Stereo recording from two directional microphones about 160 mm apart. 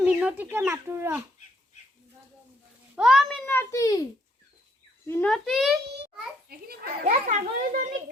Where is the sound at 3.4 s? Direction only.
15° left (ahead or behind).